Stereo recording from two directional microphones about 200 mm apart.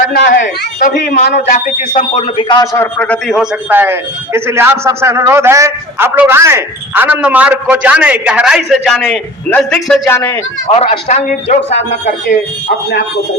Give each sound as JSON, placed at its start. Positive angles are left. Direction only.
{"t": 0.1, "sound": "a man's voice", "side_deg": 50}
{"t": 2.4, "sound": "a man's voice", "side_deg": 25}
{"t": 2.7, "sound": "a man's voice", "side_deg": 10}
{"t": 3.7, "sound": "a man's voice", "side_deg": -10}
{"t": 10.7, "sound": "a man's voice", "side_deg": 30}